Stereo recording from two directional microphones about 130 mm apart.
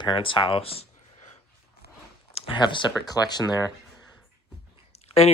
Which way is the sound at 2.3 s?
50° left (ahead or behind).